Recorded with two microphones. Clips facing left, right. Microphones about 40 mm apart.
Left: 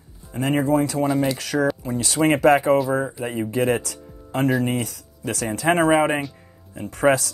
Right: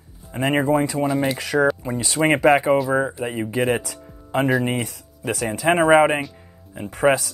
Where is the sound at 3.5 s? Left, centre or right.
Right.